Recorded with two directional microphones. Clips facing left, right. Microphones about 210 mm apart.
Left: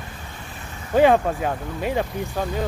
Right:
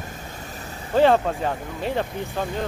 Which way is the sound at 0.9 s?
10° left (ahead or behind).